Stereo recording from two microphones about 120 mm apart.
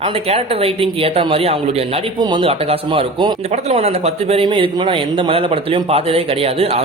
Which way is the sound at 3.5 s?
60° right (ahead or behind).